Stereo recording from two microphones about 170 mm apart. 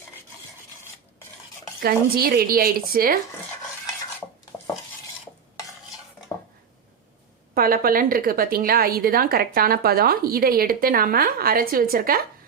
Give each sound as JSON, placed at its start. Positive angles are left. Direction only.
{"t": 1.8, "sound": "a woman's voice", "side_deg": -65}
{"t": 7.5, "sound": "a woman's voice", "side_deg": -60}